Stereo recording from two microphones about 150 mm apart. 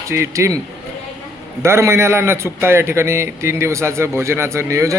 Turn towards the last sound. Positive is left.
turn(degrees=-20)  # may be behind; listen again after turning